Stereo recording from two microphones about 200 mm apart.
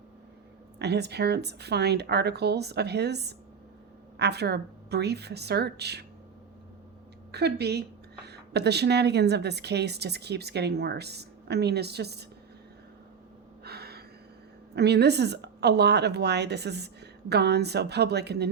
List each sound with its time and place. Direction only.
0.8 s a woman's voice: 55° right (ahead or behind)
7.3 s a woman's voice: 55° right (ahead or behind)
13.7 s a sound: 55° right (ahead or behind)
14.8 s a woman's voice: 55° right (ahead or behind)